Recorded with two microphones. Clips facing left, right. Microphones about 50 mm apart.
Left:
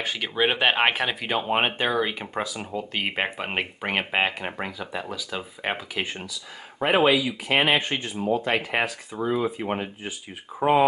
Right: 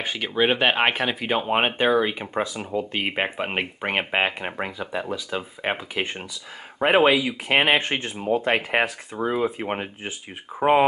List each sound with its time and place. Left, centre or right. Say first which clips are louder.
0.0 s speech: right 2 dB; centre; by 10.9 s right